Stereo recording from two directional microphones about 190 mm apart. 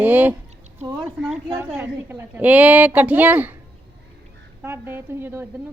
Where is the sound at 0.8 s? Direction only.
20° right (ahead or behind).